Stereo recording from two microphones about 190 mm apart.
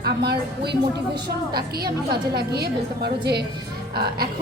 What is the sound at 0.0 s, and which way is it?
Speech, 60° right (ahead or behind).